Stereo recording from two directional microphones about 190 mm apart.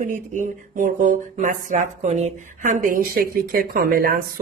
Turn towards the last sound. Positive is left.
turn(degrees=-50)  # may be behind; listen again after turning